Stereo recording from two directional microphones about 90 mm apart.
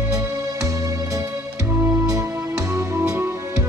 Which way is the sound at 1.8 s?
35° right (ahead or behind).